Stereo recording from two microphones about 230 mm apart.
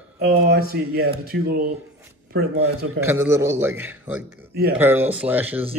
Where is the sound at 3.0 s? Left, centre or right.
Centre.